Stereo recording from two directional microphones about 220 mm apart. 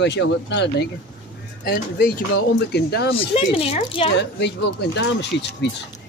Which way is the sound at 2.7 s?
45° left (ahead or behind).